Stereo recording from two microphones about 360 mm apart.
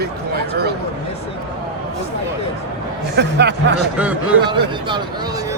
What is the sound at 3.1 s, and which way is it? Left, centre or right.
Speech, right.